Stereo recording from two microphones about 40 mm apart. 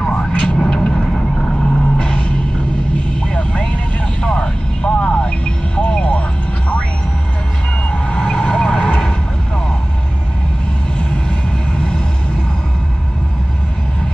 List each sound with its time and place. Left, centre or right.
0.1 s vehicle: left
7.9 s vehicle: left
11.0 s vehicle: left